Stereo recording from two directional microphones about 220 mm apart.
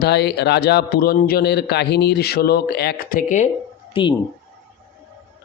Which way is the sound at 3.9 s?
20° left (ahead or behind).